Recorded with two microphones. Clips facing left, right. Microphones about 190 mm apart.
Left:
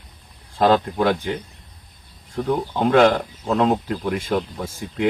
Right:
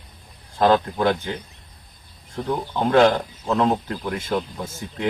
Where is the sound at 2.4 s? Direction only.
10° left (ahead or behind).